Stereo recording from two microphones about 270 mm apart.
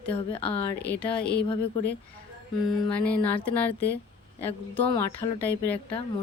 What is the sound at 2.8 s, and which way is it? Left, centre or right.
A woman's voice, centre.